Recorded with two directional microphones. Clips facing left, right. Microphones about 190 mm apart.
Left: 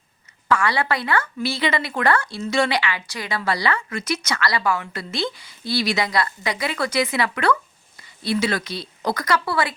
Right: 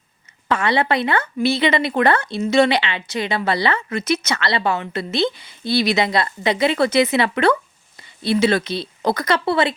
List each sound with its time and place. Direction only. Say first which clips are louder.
0.4 s a woman's voice: right 2 dB; 25° right (ahead or behind)